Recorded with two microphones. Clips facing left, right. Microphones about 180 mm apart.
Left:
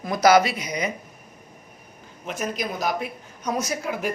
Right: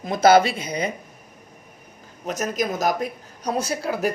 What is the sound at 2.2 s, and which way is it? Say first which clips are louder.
A man's voice: right 4 dB; 40° right (ahead or behind).